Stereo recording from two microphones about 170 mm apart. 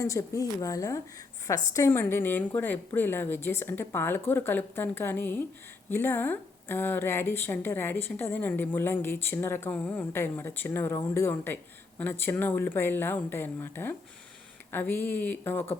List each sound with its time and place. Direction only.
0.0 s speech: 20° left (ahead or behind)